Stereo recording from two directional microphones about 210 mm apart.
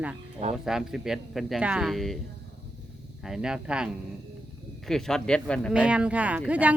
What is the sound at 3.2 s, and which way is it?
Speech, 5° right (ahead or behind).